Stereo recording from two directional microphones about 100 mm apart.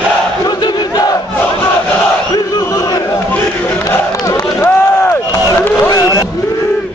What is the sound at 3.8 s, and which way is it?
Crowd, 35° left (ahead or behind).